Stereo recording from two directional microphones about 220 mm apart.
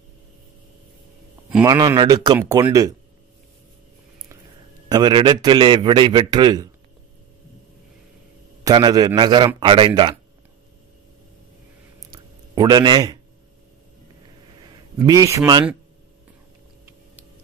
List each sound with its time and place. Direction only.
1.6 s speech: 15° right (ahead or behind)
4.8 s a man's voice: 20° right (ahead or behind)
8.6 s a man's voice: 20° right (ahead or behind)
12.1 s a sound: 20° right (ahead or behind)
15.0 s speech: 15° right (ahead or behind)